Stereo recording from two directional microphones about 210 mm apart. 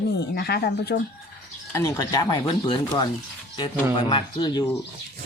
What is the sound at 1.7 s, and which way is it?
Speech, 15° left (ahead or behind).